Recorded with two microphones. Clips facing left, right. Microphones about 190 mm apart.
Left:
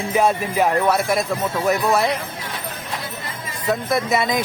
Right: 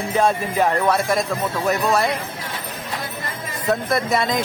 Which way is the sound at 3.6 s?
Centre (ahead or behind).